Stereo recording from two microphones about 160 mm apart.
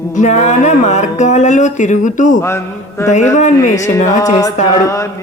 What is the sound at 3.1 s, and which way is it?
Speech, 45° left (ahead or behind).